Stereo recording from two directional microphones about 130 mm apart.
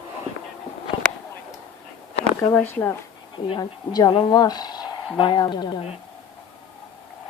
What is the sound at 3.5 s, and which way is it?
Speech, 30° left (ahead or behind).